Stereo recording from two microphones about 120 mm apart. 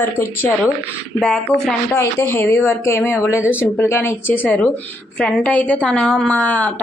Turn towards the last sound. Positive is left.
turn(degrees=10)  # may be behind; listen again after turning